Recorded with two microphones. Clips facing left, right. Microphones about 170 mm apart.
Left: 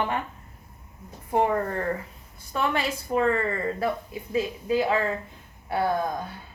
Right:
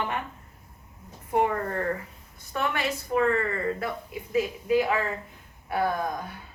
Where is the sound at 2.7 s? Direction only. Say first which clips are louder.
Left 1 dB; 25° left (ahead or behind).